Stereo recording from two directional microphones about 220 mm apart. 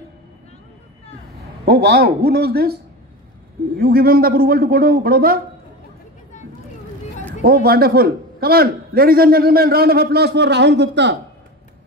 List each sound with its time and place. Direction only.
1.7 s a man's voice: 45° right (ahead or behind)
7.4 s a man's voice: 45° right (ahead or behind)